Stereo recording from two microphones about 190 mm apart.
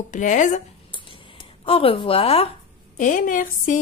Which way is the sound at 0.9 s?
25° left (ahead or behind).